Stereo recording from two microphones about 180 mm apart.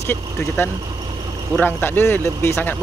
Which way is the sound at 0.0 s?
15° left (ahead or behind).